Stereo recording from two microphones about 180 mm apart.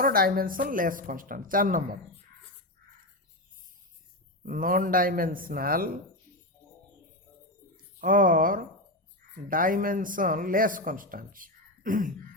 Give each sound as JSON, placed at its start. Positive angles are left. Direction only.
{"t": 0.0, "sound": "speech", "side_deg": -55}
{"t": 4.4, "sound": "speech", "side_deg": -50}
{"t": 8.0, "sound": "speech", "side_deg": -50}